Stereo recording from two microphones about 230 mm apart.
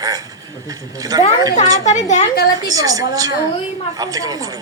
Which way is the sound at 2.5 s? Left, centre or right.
Centre.